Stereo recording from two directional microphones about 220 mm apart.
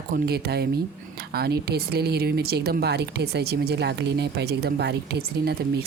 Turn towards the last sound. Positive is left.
turn(degrees=-50)  # may be behind; listen again after turning